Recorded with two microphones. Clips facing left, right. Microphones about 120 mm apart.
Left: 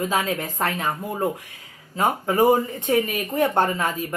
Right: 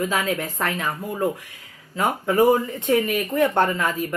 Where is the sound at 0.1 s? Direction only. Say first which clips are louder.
Even; 35° left (ahead or behind).